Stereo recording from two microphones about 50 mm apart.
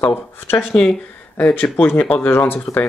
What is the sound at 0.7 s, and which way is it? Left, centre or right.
Speech, centre.